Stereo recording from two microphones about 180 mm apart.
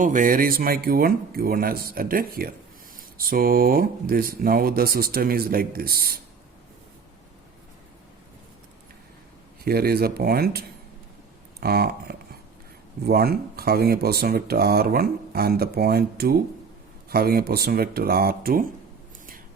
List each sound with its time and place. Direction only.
0.0 s speech: 45° right (ahead or behind)
9.6 s speech: 60° right (ahead or behind)